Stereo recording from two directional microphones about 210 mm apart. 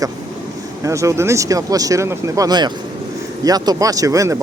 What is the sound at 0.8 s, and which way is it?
Speech, 15° right (ahead or behind).